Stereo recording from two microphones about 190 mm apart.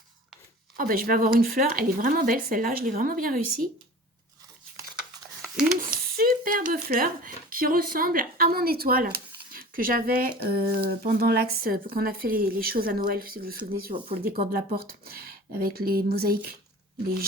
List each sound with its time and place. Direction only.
0.8 s speech: 50° right (ahead or behind)
6.1 s speech: 50° right (ahead or behind)